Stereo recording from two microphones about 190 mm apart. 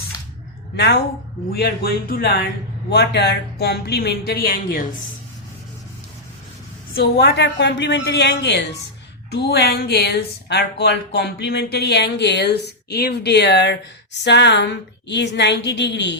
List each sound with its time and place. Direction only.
0.8 s speech: 60° left (ahead or behind)
6.9 s speech: 55° left (ahead or behind)